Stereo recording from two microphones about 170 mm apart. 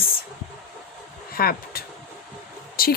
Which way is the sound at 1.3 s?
60° left (ahead or behind).